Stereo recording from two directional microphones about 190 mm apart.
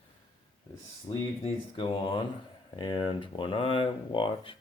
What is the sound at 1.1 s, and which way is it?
Speech, 30° left (ahead or behind).